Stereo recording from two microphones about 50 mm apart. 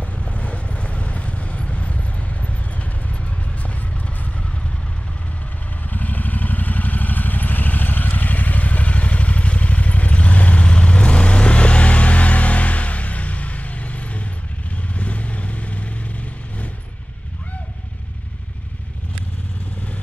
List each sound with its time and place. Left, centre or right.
0.0 s vehicle: left
5.9 s vehicle: left